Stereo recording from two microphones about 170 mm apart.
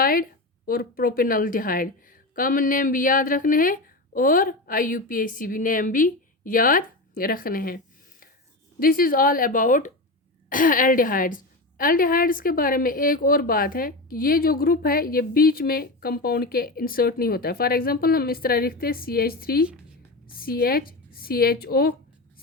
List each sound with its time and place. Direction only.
0.0 s a woman's voice: 60° left (ahead or behind)
8.8 s a woman's voice: 60° left (ahead or behind)